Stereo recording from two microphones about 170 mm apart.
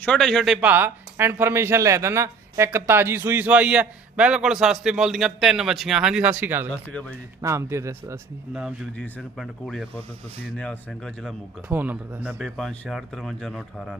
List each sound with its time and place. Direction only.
0.0 s speech: 5° left (ahead or behind); by 8.2 s 15° right (ahead or behind)
8.5 s speech: 5° right (ahead or behind)
11.7 s speech: 10° right (ahead or behind)
12.4 s speech: centre (ahead or behind)